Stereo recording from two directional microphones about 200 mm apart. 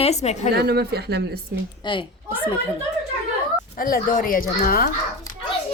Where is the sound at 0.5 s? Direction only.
55° right (ahead or behind).